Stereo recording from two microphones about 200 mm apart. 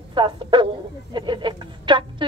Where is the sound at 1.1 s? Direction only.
25° right (ahead or behind).